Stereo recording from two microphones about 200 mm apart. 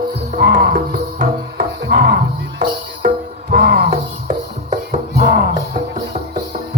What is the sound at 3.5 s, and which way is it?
Music, 50° right (ahead or behind).